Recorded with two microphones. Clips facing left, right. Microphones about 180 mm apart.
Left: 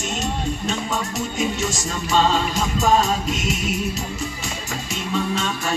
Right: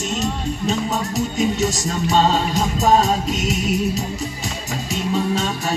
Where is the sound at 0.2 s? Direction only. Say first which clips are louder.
Right 2 dB; 40° right (ahead or behind).